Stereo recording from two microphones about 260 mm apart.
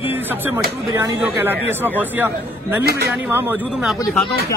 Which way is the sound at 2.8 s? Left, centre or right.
Right.